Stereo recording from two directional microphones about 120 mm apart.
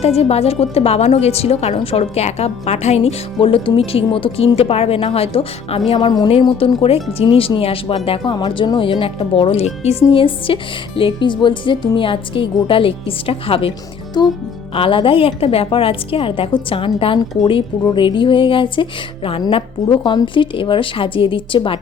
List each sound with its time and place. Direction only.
0.0 s a woman's voice: 55° left (ahead or behind)
3.4 s speech: 50° left (ahead or behind)
6.0 s speech: 40° left (ahead or behind)
14.2 s speech: 35° left (ahead or behind)
14.8 s speech: 45° left (ahead or behind)